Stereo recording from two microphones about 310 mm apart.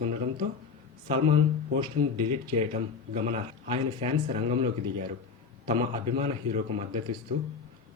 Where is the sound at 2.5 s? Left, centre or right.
Right.